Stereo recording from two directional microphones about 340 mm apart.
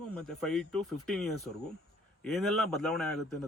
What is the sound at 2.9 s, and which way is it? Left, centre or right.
Speech, centre.